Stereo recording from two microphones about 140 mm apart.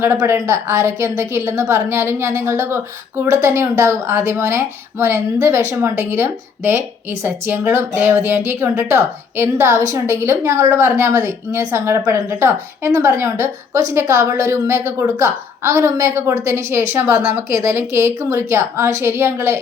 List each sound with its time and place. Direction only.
0.0 s a woman's voice: 15° right (ahead or behind)